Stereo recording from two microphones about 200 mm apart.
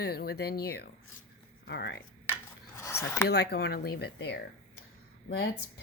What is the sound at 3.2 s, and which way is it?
Speech, 55° left (ahead or behind).